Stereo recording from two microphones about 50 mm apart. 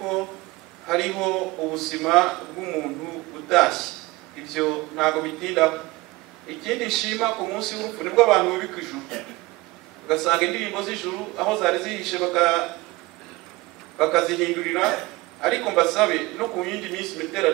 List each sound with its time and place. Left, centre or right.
0.0 s a sound: centre
0.8 s a man's voice: centre
13.9 s a man's voice: centre